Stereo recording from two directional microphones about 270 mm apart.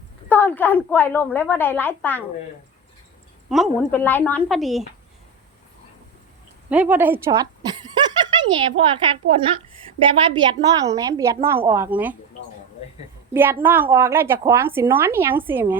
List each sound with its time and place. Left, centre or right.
0.3 s a woman's voice: centre
3.5 s a woman's voice: centre
6.7 s a sound: centre
9.4 s a woman's voice: centre
13.3 s a woman's voice: centre